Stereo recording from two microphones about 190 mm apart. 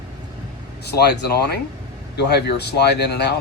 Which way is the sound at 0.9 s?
60° left (ahead or behind).